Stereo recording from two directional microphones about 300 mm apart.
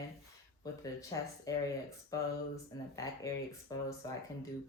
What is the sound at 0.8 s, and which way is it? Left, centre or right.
Speech, centre.